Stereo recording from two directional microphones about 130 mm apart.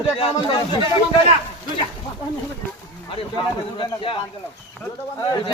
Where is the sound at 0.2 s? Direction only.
45° left (ahead or behind).